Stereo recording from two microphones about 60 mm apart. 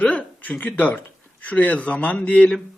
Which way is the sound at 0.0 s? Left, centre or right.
Left.